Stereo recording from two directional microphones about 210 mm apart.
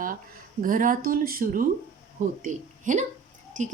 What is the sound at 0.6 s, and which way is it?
A woman's voice, 40° right (ahead or behind).